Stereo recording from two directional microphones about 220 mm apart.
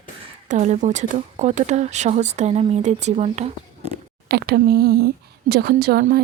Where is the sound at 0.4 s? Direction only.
30° right (ahead or behind).